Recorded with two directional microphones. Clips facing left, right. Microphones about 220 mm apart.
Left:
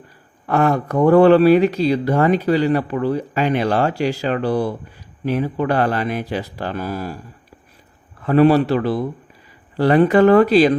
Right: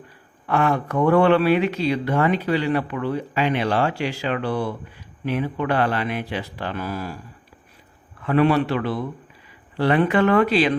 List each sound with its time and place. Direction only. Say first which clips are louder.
0.4 s speech: left 4 dB; 40° left (ahead or behind)
8.2 s speech: left 5 dB; 40° left (ahead or behind)